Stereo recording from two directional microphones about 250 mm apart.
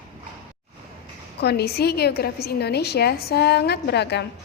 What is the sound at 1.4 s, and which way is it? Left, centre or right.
A woman's voice, left.